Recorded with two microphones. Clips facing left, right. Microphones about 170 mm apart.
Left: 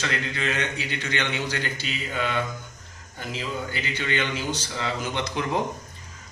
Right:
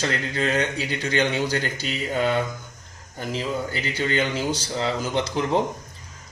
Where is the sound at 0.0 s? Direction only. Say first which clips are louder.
Right 4 dB; 40° right (ahead or behind).